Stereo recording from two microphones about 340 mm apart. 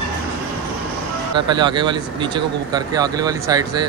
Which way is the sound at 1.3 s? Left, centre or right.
Centre.